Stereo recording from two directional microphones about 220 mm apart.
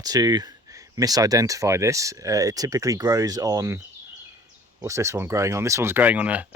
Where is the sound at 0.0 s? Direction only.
15° right (ahead or behind).